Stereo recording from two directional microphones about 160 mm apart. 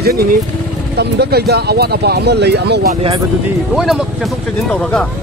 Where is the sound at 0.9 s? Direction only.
90° right.